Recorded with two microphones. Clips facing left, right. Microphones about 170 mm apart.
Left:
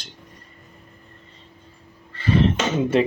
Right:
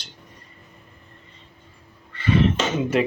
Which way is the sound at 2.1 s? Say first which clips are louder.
Even; 35° left (ahead or behind).